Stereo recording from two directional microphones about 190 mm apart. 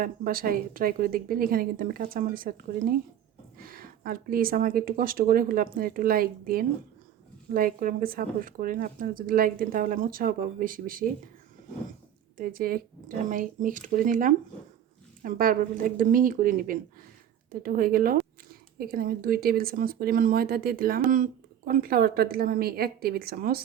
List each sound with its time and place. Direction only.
0.0 s speech: 50° right (ahead or behind)
12.4 s speech: 50° right (ahead or behind)